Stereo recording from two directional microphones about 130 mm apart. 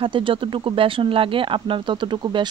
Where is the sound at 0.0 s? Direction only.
40° right (ahead or behind).